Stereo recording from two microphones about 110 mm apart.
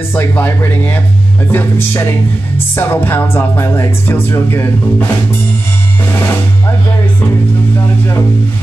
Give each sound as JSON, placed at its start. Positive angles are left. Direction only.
{"t": 0.1, "sound": "speech", "side_deg": 20}
{"t": 1.5, "sound": "music", "side_deg": 20}